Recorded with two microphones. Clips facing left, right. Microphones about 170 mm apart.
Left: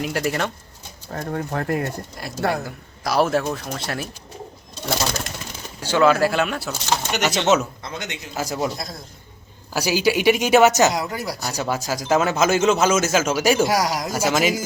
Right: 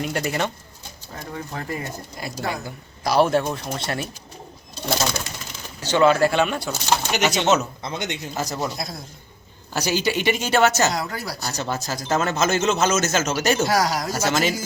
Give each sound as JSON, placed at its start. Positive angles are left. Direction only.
{"t": 0.0, "sound": "speech", "side_deg": 0}
{"t": 1.1, "sound": "speech", "side_deg": 55}
{"t": 2.6, "sound": "speech", "side_deg": 0}
{"t": 5.8, "sound": "speech", "side_deg": 5}
{"t": 7.8, "sound": "speech", "side_deg": -20}
{"t": 8.4, "sound": "speech", "side_deg": 5}
{"t": 9.7, "sound": "speech", "side_deg": 10}